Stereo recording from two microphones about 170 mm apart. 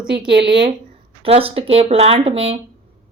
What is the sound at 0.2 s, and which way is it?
A woman's voice, 30° right (ahead or behind).